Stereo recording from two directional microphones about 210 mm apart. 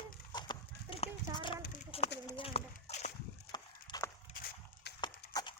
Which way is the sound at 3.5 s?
20° left (ahead or behind).